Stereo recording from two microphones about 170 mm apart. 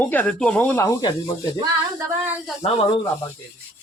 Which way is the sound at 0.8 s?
20° left (ahead or behind).